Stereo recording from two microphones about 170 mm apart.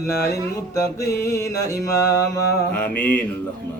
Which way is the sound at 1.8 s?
20° left (ahead or behind).